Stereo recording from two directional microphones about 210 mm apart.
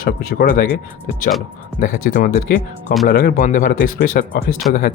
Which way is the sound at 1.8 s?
40° left (ahead or behind).